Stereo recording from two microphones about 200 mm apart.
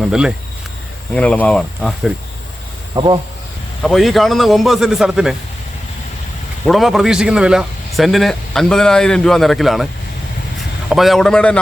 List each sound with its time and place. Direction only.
0.0 s a man's voice: 5° right (ahead or behind)
2.9 s speech: 20° right (ahead or behind)
3.8 s a man's voice: centre (ahead or behind)
6.7 s a man's voice: centre (ahead or behind)